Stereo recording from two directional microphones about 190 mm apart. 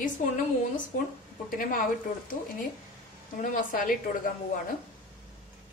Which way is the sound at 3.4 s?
45° left (ahead or behind).